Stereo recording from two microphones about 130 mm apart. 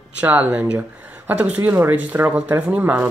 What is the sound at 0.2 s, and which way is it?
Speech, 10° right (ahead or behind).